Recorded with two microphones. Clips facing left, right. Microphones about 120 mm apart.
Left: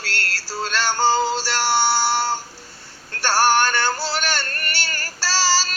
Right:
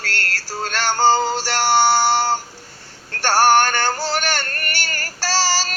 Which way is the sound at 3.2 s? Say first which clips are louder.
Right 3 dB; 45° right (ahead or behind).